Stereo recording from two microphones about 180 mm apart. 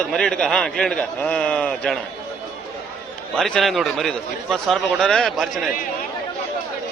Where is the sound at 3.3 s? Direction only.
5° left (ahead or behind).